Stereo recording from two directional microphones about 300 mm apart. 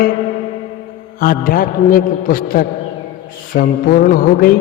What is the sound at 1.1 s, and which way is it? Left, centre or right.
A man's voice, left.